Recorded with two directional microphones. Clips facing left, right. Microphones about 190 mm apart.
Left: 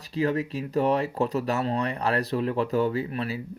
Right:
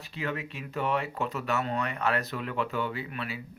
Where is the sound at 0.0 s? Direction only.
35° left (ahead or behind).